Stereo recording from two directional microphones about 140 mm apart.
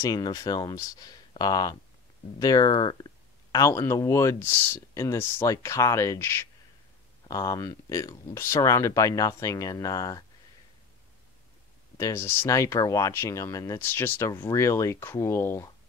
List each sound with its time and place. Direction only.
0.0 s speech: 25° left (ahead or behind)
12.0 s speech: 20° left (ahead or behind)